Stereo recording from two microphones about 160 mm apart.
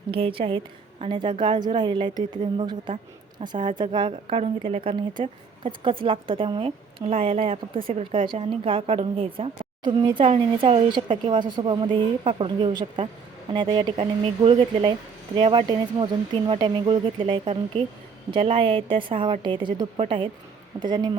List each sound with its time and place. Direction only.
0.1 s speech: 35° right (ahead or behind)
20.7 s speech: 20° right (ahead or behind)